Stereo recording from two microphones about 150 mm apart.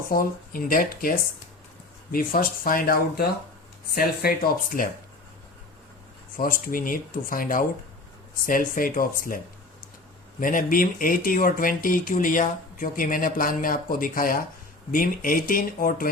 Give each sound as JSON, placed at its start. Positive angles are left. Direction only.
{"t": 0.1, "sound": "speech", "side_deg": 70}
{"t": 2.1, "sound": "speech", "side_deg": 75}
{"t": 4.7, "sound": "speech", "side_deg": 75}
{"t": 6.3, "sound": "speech", "side_deg": 70}
{"t": 10.4, "sound": "speech", "side_deg": 65}